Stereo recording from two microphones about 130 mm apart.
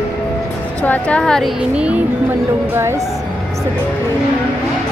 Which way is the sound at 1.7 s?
10° right (ahead or behind).